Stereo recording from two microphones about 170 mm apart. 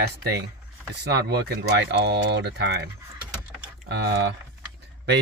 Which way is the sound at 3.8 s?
75° right (ahead or behind).